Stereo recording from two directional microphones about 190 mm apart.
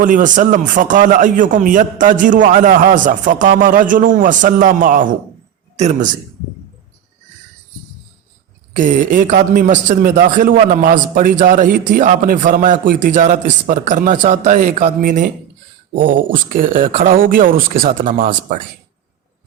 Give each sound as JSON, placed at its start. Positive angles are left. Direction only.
{"t": 0.0, "sound": "a man's voice", "side_deg": -40}
{"t": 8.7, "sound": "a man's voice", "side_deg": -45}